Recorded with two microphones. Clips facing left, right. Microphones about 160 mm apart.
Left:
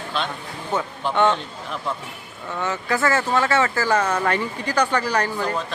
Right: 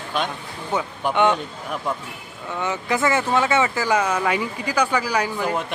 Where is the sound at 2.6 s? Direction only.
15° right (ahead or behind).